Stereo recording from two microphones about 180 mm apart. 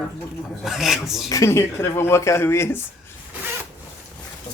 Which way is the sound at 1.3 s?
15° left (ahead or behind).